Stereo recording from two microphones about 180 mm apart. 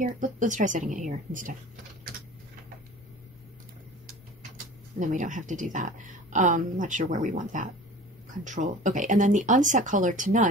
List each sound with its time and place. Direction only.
0.0 s speech: 45° right (ahead or behind)
4.9 s speech: 45° right (ahead or behind)